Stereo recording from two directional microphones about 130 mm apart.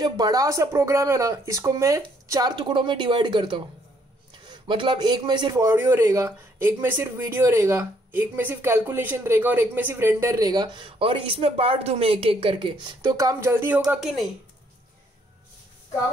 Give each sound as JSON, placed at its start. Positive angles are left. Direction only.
{"t": 0.0, "sound": "a man's voice", "side_deg": -30}
{"t": 2.5, "sound": "a man's voice", "side_deg": -35}